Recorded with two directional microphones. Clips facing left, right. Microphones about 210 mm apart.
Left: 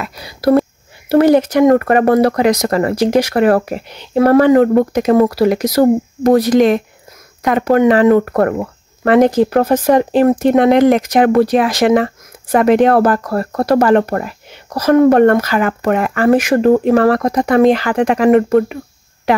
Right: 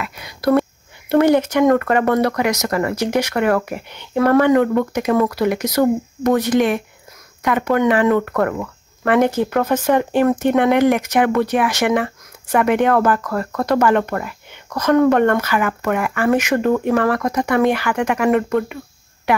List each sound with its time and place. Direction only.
0.0 s speech: 35° left (ahead or behind)
1.7 s speech: 25° left (ahead or behind)
3.7 s speech: 15° left (ahead or behind)
4.1 s speech: 35° left (ahead or behind)